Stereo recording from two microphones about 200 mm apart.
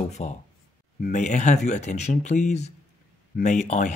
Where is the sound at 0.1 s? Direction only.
35° left (ahead or behind).